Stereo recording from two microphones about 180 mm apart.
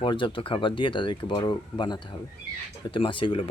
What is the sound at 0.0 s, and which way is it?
Speech, 30° left (ahead or behind).